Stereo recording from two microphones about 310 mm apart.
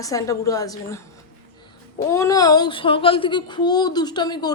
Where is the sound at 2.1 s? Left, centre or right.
Centre.